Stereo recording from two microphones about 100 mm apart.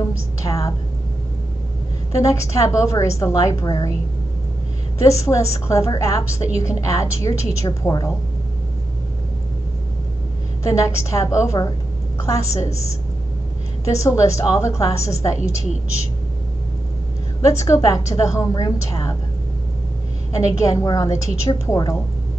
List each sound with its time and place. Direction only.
0.4 s a woman's voice: 35° left (ahead or behind)
2.1 s a woman's voice: 30° left (ahead or behind)
5.0 s a woman's voice: 30° left (ahead or behind)
10.7 s a woman's voice: 30° left (ahead or behind)
13.8 s a woman's voice: 30° left (ahead or behind)
17.4 s a woman's voice: 30° left (ahead or behind)
20.3 s a woman's voice: 35° left (ahead or behind)